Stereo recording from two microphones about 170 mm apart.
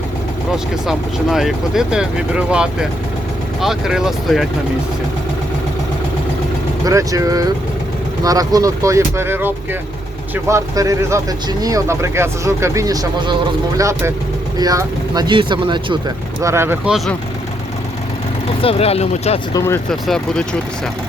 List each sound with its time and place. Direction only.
0.5 s speech: centre (ahead or behind)
6.8 s speech: 20° right (ahead or behind)
18.6 s speech: 35° left (ahead or behind)
19.5 s speech: 15° left (ahead or behind)
19.9 s speech: 5° left (ahead or behind)